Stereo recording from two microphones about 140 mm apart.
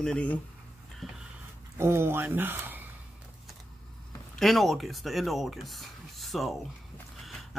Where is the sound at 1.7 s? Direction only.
20° right (ahead or behind).